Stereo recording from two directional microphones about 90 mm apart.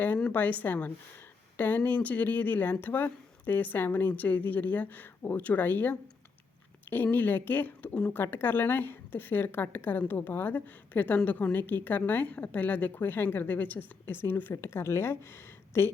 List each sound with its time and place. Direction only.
0.3 s speech: 20° left (ahead or behind)